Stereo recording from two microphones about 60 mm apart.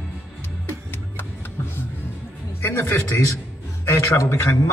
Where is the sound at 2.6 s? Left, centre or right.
Left.